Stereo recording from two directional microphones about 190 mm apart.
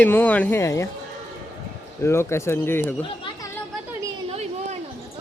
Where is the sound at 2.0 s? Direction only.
15° left (ahead or behind).